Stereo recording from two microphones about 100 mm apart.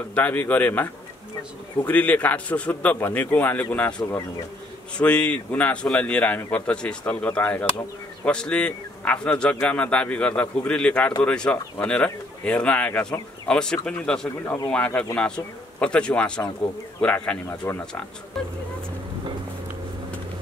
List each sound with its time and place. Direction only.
0.1 s a man's voice: 15° left (ahead or behind)
1.9 s a man's voice: 15° left (ahead or behind)